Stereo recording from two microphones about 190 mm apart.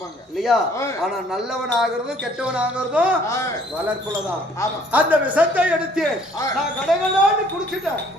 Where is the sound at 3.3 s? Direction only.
15° left (ahead or behind).